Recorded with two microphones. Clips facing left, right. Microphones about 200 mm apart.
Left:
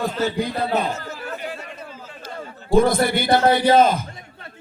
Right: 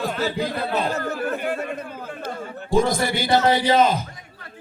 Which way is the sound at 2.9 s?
55° left (ahead or behind).